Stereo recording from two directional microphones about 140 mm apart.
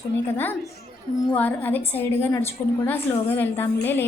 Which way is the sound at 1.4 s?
10° left (ahead or behind).